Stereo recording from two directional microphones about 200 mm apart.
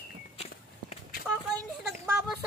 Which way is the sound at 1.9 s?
5° right (ahead or behind).